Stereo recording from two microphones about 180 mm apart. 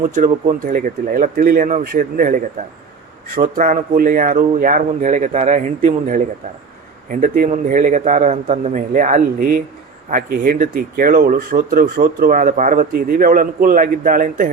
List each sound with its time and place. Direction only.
0.0 s speech: 45° right (ahead or behind)